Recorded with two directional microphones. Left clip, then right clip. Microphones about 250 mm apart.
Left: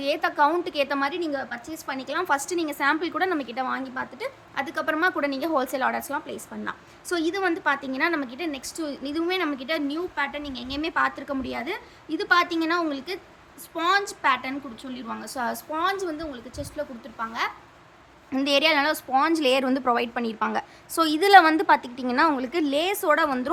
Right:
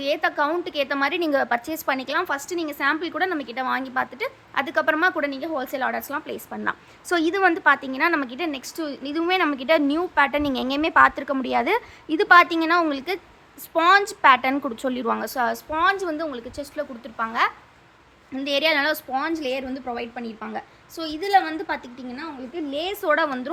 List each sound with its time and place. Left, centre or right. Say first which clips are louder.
0.0 s a woman's voice: even; centre
18.3 s a woman's voice: left 1 dB; centre